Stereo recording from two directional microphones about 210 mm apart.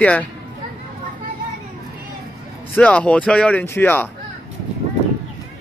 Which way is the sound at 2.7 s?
5° left (ahead or behind).